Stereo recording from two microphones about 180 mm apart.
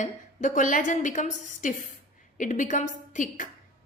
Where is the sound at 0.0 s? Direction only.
45° left (ahead or behind).